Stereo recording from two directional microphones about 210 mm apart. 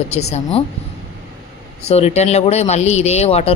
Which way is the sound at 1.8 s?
30° left (ahead or behind).